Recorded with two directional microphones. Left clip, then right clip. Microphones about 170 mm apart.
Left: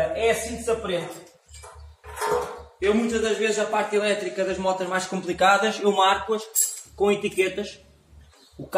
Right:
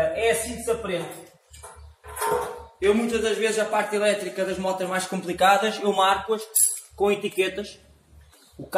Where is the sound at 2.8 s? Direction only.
10° right (ahead or behind).